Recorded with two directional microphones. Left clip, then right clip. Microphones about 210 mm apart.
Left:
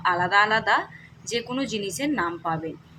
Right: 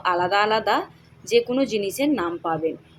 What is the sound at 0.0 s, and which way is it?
A woman's voice, 20° right (ahead or behind).